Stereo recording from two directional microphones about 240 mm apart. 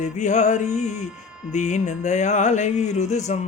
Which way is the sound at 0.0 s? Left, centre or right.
Left.